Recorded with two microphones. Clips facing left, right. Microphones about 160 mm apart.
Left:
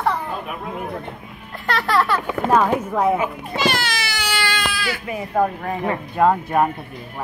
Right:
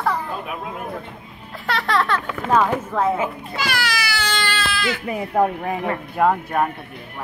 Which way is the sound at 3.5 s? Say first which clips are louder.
Left 4 dB; 25° left (ahead or behind).